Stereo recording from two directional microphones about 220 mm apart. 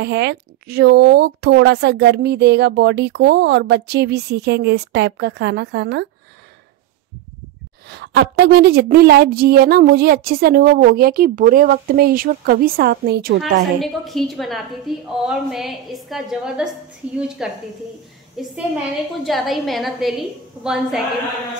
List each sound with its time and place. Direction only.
0.0 s a woman's voice: 50° right (ahead or behind)
7.9 s a woman's voice: 50° right (ahead or behind)
13.4 s a woman's voice: centre (ahead or behind)